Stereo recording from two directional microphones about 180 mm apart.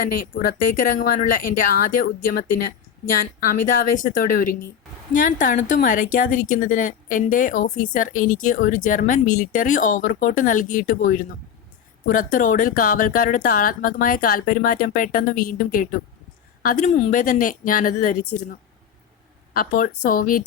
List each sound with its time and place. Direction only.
0.0 s speech: 50° left (ahead or behind)
19.5 s speech: 50° left (ahead or behind)